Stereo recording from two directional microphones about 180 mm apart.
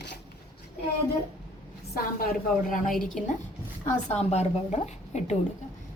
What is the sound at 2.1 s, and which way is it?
A woman's voice, 50° left (ahead or behind).